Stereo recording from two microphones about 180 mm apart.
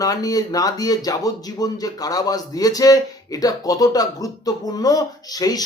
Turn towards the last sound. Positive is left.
turn(degrees=20)  # may be behind; listen again after turning